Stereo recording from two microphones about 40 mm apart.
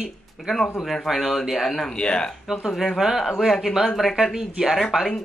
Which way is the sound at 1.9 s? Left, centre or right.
Left.